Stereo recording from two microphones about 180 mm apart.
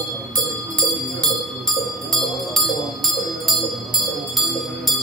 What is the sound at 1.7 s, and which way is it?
Bell, centre (ahead or behind).